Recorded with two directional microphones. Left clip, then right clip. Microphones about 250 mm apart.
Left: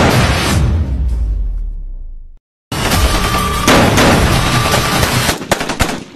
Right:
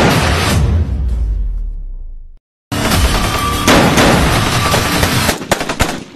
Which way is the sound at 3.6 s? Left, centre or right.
Centre.